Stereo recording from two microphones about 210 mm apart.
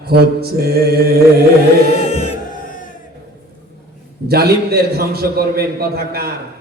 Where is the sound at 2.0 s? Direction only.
30° left (ahead or behind).